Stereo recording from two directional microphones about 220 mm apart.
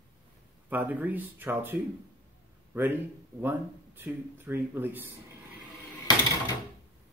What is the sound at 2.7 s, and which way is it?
Speech, 10° right (ahead or behind).